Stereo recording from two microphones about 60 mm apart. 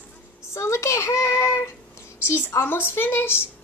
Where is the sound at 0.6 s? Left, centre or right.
Left.